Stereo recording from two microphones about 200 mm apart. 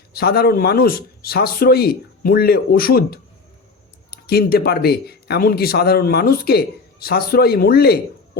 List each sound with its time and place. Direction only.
0.1 s speech: 50° left (ahead or behind)